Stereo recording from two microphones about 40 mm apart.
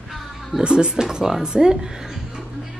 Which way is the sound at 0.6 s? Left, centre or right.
Right.